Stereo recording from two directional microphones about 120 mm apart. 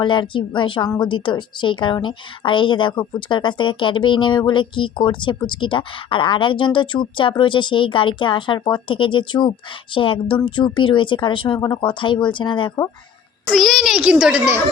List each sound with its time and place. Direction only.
0.0 s a woman's voice: 40° left (ahead or behind)
13.5 s a child's voice: centre (ahead or behind); by 14.6 s 15° right (ahead or behind)